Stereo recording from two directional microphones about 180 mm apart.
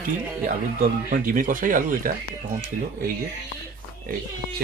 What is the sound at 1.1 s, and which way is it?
Speech, 50° right (ahead or behind).